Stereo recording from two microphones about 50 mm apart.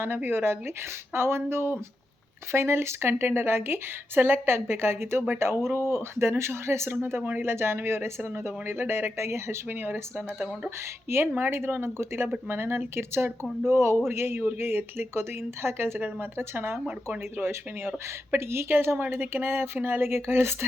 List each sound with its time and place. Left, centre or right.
0.0 s speech: right
7.0 s speech: right
9.6 s speech: right
11.3 s speech: right